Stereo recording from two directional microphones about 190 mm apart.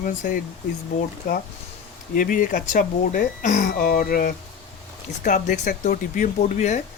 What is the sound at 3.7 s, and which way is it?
Speech, 50° left (ahead or behind).